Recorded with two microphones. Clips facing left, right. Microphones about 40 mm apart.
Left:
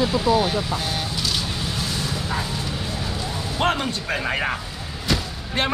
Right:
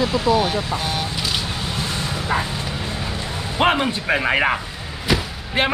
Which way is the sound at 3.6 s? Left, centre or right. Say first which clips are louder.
Right 5 dB; right.